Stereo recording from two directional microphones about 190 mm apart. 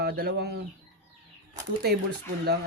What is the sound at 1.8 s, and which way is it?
Speech, 60° right (ahead or behind).